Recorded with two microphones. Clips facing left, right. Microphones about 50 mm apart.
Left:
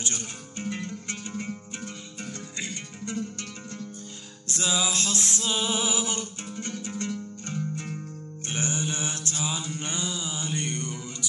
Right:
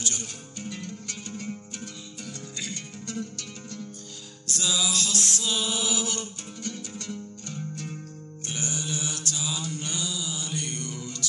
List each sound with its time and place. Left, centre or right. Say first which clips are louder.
0.0 s music: even; left
8.5 s mantra: left 3 dB; left